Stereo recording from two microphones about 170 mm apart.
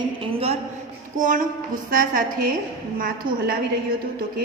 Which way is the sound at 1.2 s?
50° right (ahead or behind).